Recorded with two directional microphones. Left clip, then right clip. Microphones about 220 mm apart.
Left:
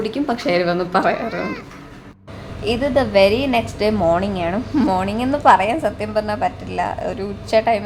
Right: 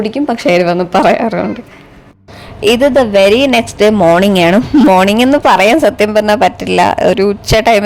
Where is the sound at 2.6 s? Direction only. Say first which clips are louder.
Right 10 dB; 45° right (ahead or behind).